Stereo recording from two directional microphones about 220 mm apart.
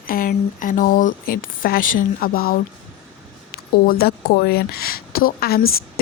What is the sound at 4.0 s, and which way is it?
Speech, 45° left (ahead or behind).